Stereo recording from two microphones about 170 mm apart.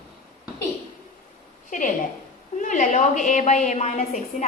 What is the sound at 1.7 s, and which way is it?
A woman's voice, 50° left (ahead or behind).